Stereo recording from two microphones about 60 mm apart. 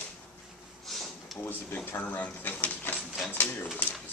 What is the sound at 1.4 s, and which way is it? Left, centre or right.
Speech, left.